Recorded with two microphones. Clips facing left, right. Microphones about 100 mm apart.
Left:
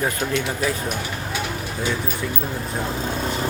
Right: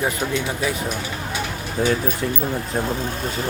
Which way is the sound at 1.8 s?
50° right (ahead or behind).